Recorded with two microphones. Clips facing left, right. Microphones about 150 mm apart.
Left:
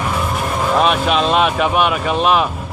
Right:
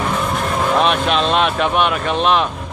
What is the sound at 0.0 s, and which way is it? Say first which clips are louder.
Vehicle: even; 5° left (ahead or behind).